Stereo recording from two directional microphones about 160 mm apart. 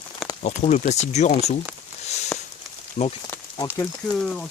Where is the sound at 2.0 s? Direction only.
45° left (ahead or behind).